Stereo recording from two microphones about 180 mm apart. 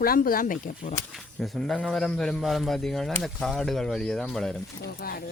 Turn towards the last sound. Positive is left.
turn(degrees=55)  # may be behind; listen again after turning